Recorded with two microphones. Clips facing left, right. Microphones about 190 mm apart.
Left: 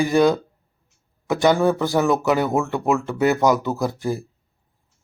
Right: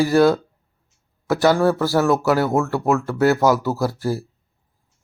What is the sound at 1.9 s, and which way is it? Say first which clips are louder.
Speech: right 1 dB; centre (ahead or behind).